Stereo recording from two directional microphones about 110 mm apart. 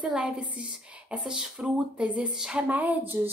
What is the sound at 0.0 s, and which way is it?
A woman's voice, 10° right (ahead or behind).